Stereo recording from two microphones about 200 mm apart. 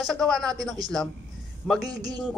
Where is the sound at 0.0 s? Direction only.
Centre (ahead or behind).